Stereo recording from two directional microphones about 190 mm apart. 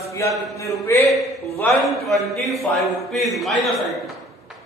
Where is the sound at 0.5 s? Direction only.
15° left (ahead or behind).